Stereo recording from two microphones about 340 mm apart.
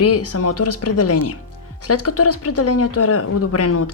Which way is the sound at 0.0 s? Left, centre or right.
Left.